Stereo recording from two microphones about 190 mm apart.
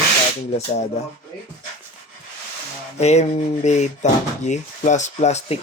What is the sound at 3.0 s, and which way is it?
Speech, 35° left (ahead or behind).